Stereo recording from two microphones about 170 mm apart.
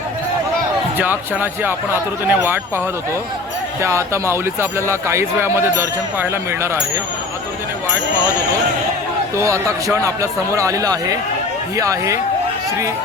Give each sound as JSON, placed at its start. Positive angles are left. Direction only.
{"t": 0.9, "sound": "speech", "side_deg": -10}
{"t": 3.8, "sound": "speech", "side_deg": -15}
{"t": 9.4, "sound": "a man's voice", "side_deg": -15}